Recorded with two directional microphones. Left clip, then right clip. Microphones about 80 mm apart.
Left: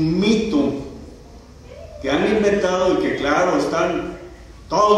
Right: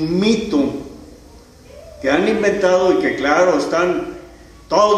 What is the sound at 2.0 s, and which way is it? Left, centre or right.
A man's voice, right.